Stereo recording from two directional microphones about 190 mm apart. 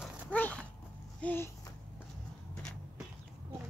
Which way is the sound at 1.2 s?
10° left (ahead or behind).